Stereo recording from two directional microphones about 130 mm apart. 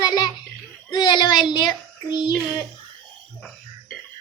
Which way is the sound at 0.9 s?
35° left (ahead or behind).